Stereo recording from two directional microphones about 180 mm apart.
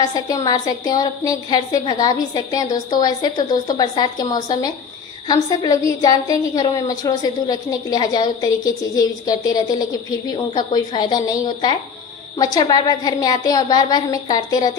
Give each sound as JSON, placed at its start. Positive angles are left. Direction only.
{"t": 0.0, "sound": "a woman's voice", "side_deg": 20}